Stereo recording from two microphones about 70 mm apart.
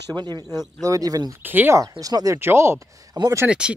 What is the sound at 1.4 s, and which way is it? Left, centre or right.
Speech, right.